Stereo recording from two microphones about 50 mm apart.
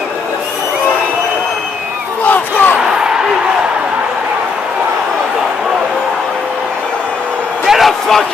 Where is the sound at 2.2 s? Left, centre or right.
Left.